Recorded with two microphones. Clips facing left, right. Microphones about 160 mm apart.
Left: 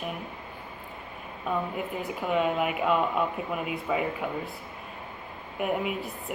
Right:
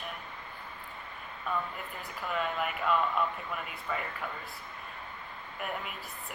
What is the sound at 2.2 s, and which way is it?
Speech, 5° left (ahead or behind).